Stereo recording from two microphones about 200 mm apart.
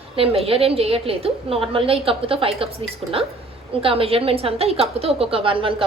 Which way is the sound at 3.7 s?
30° right (ahead or behind).